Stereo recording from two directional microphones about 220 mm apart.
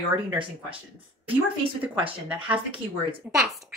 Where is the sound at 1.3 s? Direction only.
25° right (ahead or behind).